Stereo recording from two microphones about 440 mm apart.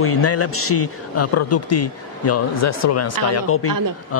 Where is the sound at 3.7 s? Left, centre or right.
Right.